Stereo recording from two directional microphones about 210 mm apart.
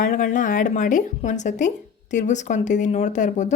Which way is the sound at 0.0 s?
40° left (ahead or behind).